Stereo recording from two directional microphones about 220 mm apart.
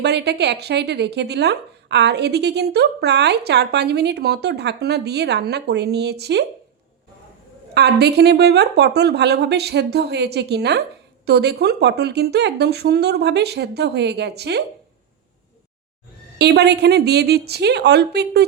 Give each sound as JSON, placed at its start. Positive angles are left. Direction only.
{"t": 0.0, "sound": "speech", "side_deg": -50}
{"t": 7.7, "sound": "speech", "side_deg": -50}
{"t": 16.4, "sound": "speech", "side_deg": -50}